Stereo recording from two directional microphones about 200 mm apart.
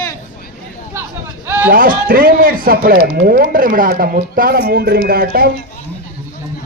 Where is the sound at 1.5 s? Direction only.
10° right (ahead or behind).